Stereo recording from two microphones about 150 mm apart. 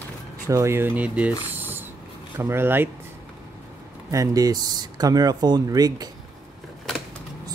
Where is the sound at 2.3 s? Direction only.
15° right (ahead or behind).